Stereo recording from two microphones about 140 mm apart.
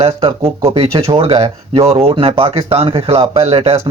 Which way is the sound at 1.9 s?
45° right (ahead or behind).